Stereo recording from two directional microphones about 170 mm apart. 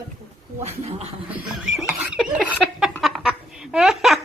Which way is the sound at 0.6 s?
35° right (ahead or behind).